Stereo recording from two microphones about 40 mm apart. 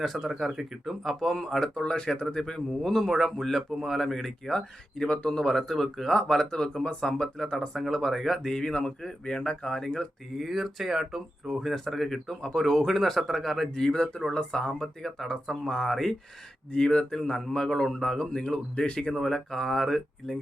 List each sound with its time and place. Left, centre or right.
0.0 s speech: centre
0.3 s speech: centre
4.4 s speech: centre
5.5 s speech: centre
7.7 s speech: centre
8.5 s speech: centre
10.3 s speech: centre
13.7 s speech: centre
16.7 s speech: left
19.5 s speech: centre